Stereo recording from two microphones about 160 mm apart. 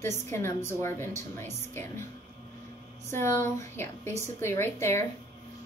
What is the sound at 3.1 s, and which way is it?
Speech, 15° left (ahead or behind).